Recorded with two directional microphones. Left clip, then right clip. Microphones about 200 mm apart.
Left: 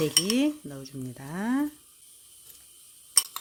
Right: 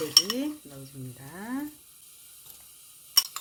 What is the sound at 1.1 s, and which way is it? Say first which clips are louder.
Speech: left 7 dB; 60° left (ahead or behind).